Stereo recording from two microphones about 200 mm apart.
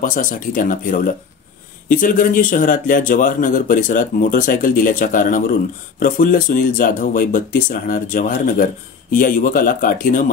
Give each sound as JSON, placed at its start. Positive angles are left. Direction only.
{"t": 0.0, "sound": "speech", "side_deg": 40}